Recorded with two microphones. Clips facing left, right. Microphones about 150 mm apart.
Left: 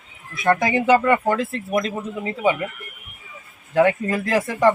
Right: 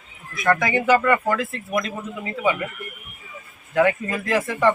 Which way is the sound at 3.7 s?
30° left (ahead or behind).